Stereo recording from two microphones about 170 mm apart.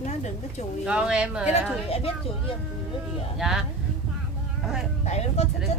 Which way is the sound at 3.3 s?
Centre (ahead or behind).